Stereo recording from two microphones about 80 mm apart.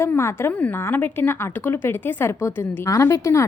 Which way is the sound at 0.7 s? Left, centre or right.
Left.